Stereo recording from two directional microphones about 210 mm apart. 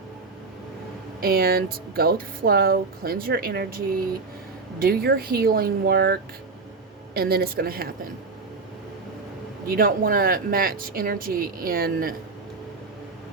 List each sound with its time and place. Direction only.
1.2 s speech: 45° right (ahead or behind)
9.6 s speech: 45° right (ahead or behind)